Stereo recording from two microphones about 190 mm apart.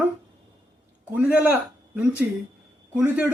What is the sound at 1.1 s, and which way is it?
A man's voice, 10° right (ahead or behind).